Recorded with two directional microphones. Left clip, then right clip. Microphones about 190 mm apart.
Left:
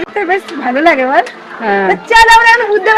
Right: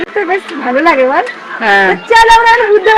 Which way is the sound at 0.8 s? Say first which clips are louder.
Even; 5° left (ahead or behind).